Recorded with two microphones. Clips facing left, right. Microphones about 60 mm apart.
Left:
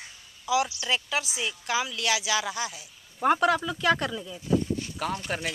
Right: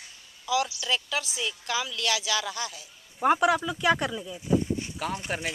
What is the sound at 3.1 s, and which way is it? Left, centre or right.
Speech, centre.